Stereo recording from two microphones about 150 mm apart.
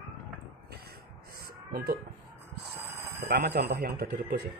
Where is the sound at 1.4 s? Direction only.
90° right.